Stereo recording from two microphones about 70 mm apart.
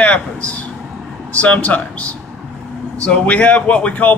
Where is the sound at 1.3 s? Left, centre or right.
Left.